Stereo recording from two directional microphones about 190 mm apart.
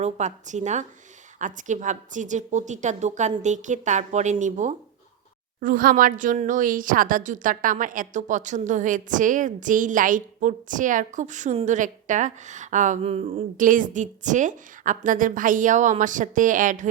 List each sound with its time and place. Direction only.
0.0 s a woman's voice: 40° right (ahead or behind)
13.6 s speech: 45° right (ahead or behind)